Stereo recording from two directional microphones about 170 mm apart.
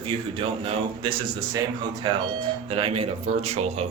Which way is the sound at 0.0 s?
35° right (ahead or behind).